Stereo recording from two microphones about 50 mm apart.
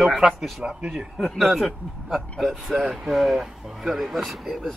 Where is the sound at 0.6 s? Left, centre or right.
Centre.